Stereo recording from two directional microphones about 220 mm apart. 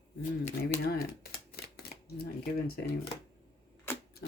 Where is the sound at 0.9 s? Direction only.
45° left (ahead or behind).